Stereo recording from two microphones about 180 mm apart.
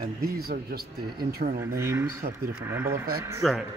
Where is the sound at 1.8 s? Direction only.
15° right (ahead or behind).